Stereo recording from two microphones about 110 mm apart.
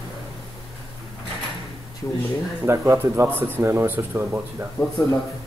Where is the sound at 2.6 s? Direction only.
25° right (ahead or behind).